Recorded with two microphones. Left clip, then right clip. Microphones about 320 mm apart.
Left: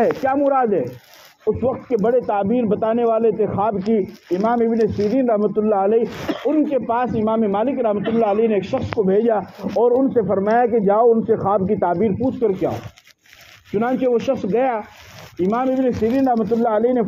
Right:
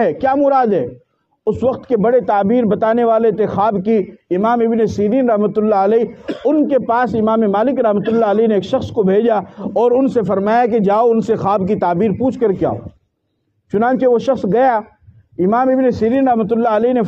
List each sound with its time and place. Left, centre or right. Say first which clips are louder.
0.0 s a man's voice: right 4 dB; right
13.7 s a man's voice: right 5 dB; right